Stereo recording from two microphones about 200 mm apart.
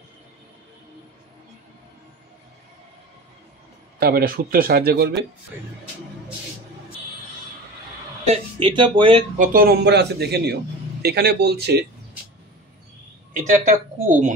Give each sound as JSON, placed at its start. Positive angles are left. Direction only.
{"t": 4.0, "sound": "a man's voice", "side_deg": -45}
{"t": 8.3, "sound": "speech", "side_deg": -25}
{"t": 9.4, "sound": "a man's voice", "side_deg": -45}
{"t": 13.5, "sound": "speech", "side_deg": -40}